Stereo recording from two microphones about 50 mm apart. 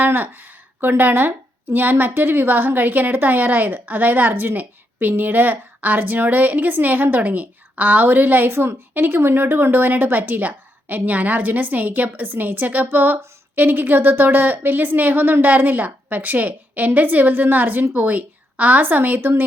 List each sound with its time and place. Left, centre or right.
0.0 s a woman's voice: right